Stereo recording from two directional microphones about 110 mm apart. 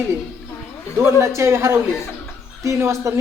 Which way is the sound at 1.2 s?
25° right (ahead or behind).